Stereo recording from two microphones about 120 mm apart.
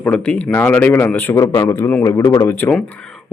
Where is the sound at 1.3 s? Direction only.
25° left (ahead or behind).